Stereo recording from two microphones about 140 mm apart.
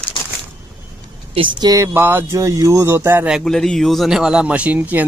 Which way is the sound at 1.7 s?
20° right (ahead or behind).